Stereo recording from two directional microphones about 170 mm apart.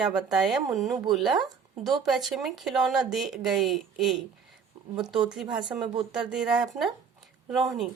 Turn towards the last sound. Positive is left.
turn(degrees=0)  # may be behind; listen again after turning